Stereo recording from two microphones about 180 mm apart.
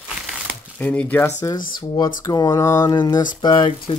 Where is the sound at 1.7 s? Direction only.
20° left (ahead or behind).